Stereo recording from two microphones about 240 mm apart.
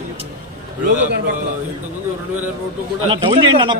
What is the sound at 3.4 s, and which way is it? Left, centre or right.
Speech, centre.